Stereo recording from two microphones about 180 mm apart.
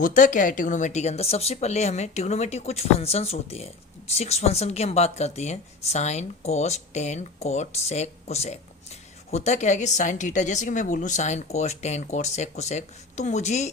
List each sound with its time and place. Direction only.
0.0 s speech: 45° left (ahead or behind)